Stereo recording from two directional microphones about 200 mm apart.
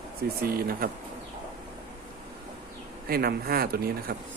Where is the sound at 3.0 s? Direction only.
50° right (ahead or behind).